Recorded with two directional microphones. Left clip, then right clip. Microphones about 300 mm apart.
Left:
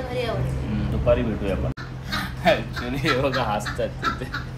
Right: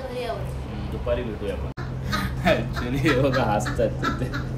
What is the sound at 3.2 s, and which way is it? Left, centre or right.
Speech, centre.